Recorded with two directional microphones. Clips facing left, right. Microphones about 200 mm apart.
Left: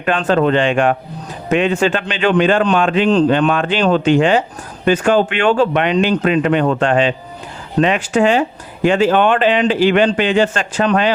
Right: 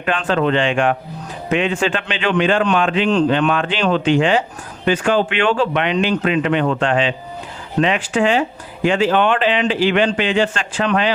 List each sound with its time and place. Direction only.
0.0 s speech: 40° left (ahead or behind)